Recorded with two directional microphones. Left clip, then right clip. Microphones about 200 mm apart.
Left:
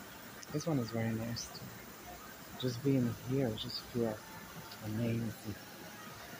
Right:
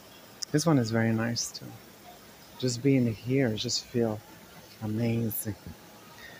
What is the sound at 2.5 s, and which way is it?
Speech, 60° right (ahead or behind).